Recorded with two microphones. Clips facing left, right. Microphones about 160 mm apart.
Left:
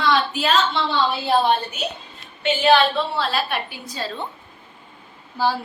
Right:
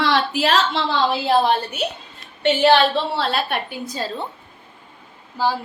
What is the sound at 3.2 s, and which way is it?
Speech, 55° right (ahead or behind).